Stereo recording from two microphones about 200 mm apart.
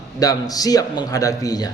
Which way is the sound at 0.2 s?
20° left (ahead or behind).